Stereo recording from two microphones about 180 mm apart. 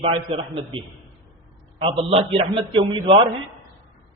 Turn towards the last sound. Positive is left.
turn(degrees=-30)  # may be behind; listen again after turning